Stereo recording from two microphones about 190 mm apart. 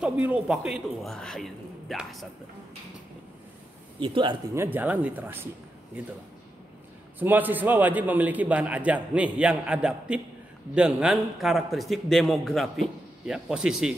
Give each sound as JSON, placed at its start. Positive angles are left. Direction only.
{"t": 0.0, "sound": "a man's voice", "side_deg": -5}
{"t": 4.0, "sound": "speech", "side_deg": -25}
{"t": 4.6, "sound": "a man's voice", "side_deg": -10}
{"t": 7.2, "sound": "a man's voice", "side_deg": -10}